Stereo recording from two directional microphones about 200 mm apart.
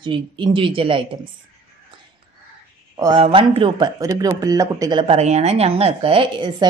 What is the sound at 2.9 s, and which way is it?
A woman's voice, 25° right (ahead or behind).